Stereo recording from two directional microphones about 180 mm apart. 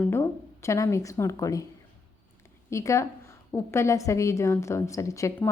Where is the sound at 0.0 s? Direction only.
15° left (ahead or behind).